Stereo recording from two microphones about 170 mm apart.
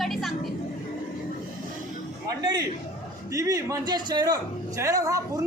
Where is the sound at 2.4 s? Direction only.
20° right (ahead or behind).